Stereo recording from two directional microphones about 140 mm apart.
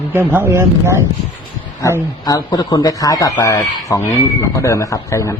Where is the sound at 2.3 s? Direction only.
30° left (ahead or behind).